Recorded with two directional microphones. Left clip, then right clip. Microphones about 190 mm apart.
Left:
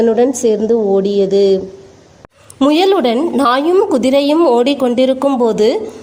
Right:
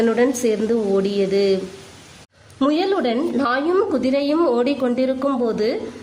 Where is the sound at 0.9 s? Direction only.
15° left (ahead or behind).